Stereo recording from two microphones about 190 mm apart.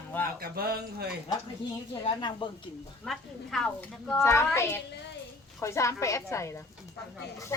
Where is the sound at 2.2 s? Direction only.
25° left (ahead or behind).